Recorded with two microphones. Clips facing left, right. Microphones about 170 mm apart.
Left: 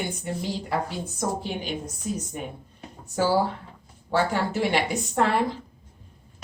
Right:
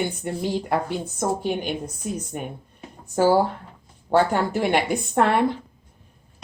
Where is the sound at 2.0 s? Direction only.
60° right (ahead or behind).